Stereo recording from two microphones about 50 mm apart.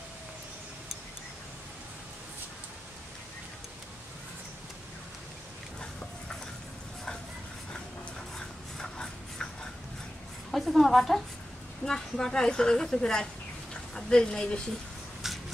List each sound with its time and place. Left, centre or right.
8.4 s a sound: centre
10.5 s a woman's voice: centre
15.2 s rub: centre